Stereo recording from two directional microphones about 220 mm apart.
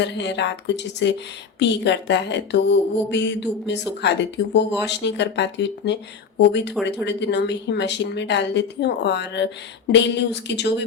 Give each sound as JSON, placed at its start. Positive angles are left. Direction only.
{"t": 0.0, "sound": "speech", "side_deg": 55}